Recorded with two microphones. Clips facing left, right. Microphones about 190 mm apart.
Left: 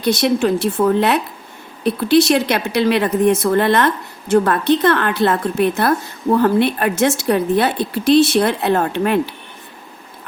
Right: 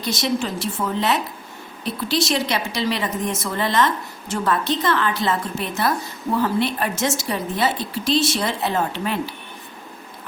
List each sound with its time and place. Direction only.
0.0 s speech: 60° left (ahead or behind)